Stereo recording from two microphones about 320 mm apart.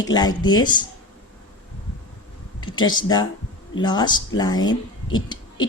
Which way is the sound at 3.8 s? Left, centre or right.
Centre.